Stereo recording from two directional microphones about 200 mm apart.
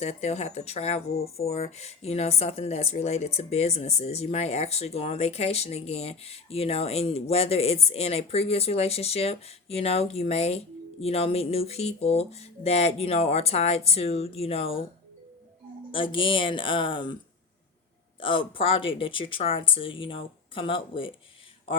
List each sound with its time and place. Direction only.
0.0 s speech: 30° left (ahead or behind)
15.9 s speech: 25° left (ahead or behind)
18.2 s speech: 25° left (ahead or behind)